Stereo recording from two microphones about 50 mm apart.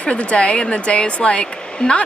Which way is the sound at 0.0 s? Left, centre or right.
Left.